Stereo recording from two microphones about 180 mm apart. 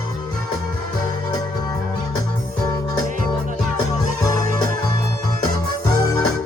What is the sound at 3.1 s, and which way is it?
Music, 45° right (ahead or behind).